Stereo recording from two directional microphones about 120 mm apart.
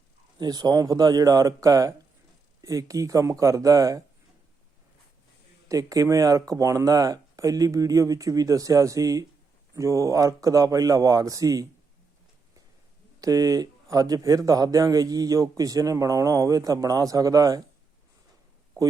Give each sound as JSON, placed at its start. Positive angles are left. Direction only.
{"t": 0.3, "sound": "a man's voice", "side_deg": -35}
{"t": 5.6, "sound": "a man's voice", "side_deg": -30}
{"t": 13.2, "sound": "a man's voice", "side_deg": -30}